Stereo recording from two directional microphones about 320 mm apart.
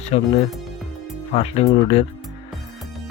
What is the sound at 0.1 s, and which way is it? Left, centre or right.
Speech, centre.